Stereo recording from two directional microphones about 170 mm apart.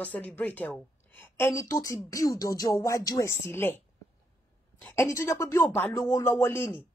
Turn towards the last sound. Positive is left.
turn(degrees=15)  # may be behind; listen again after turning